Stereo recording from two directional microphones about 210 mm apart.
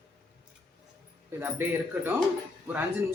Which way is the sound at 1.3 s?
10° right (ahead or behind).